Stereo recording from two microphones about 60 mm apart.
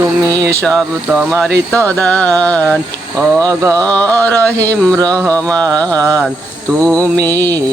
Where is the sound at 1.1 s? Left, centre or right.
Right.